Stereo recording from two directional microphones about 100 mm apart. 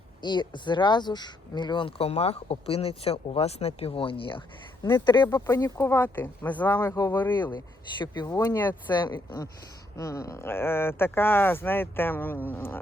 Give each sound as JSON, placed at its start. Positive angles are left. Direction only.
{"t": 0.2, "sound": "speech", "side_deg": 50}
{"t": 2.0, "sound": "speech", "side_deg": 90}
{"t": 4.9, "sound": "speech", "side_deg": 50}
{"t": 5.5, "sound": "speech", "side_deg": 35}
{"t": 7.5, "sound": "speech", "side_deg": 50}
{"t": 8.3, "sound": "speech", "side_deg": 25}
{"t": 9.0, "sound": "speech", "side_deg": 45}
{"t": 10.0, "sound": "speech", "side_deg": 30}